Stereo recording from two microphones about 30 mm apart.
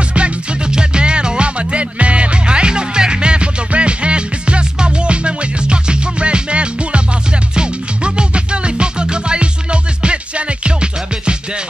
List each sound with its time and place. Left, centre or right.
0.7 s music: right